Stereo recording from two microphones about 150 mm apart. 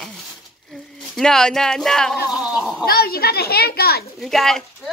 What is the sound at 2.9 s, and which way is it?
A woman's voice, 90° left.